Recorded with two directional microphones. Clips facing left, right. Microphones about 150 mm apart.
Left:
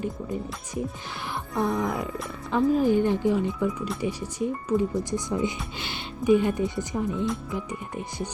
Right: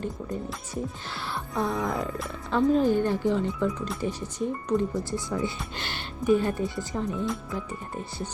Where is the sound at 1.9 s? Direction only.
Centre (ahead or behind).